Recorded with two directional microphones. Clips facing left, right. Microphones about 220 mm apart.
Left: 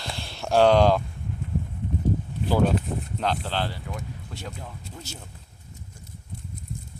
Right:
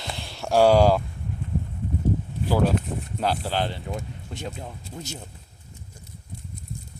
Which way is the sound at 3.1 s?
10° right (ahead or behind).